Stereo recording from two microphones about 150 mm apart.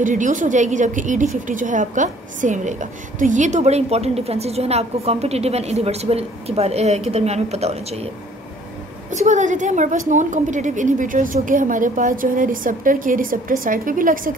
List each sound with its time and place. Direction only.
0.0 s a woman's voice: 60° right (ahead or behind)
9.1 s a woman's voice: 55° right (ahead or behind)